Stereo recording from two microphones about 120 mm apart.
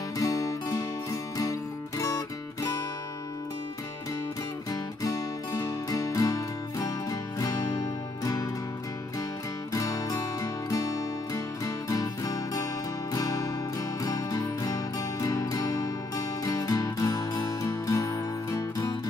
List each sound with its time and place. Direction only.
0.2 s music: 30° left (ahead or behind)
5.0 s music: 25° left (ahead or behind)
9.7 s music: 30° left (ahead or behind)